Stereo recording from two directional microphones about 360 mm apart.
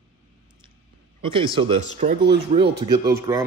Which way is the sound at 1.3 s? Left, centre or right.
Centre.